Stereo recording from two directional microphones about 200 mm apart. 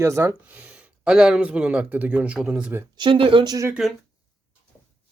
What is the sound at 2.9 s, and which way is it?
Speech, 25° right (ahead or behind).